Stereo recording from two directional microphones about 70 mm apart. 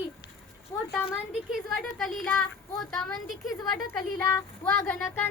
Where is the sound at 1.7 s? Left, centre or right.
Centre.